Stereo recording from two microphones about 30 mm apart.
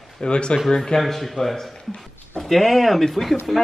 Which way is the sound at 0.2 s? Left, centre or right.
Left.